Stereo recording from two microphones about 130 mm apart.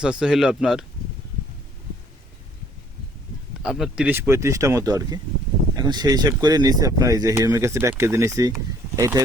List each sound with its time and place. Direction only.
0.0 s speech: 5° right (ahead or behind)
3.6 s speech: 5° right (ahead or behind); by 9.2 s 30° right (ahead or behind)